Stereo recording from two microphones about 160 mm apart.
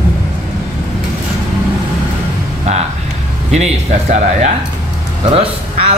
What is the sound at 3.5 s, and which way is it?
A man's voice, 45° right (ahead or behind).